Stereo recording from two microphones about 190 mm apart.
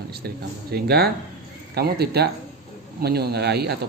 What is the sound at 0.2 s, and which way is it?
Speech, 55° right (ahead or behind).